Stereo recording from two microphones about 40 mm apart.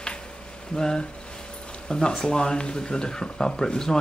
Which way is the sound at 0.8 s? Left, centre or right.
Centre.